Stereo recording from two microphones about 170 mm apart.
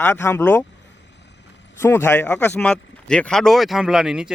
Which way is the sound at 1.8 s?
15° left (ahead or behind).